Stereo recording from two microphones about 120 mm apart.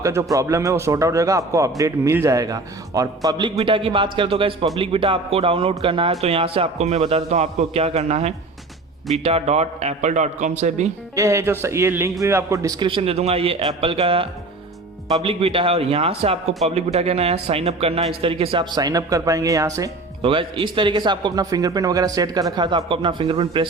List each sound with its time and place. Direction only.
0.0 s a man's voice: 25° right (ahead or behind)
3.6 s a man's voice: 50° right (ahead or behind); by 10.8 s 80° right
11.1 s a man's voice: 25° right (ahead or behind)
20.2 s a man's voice: 45° right (ahead or behind)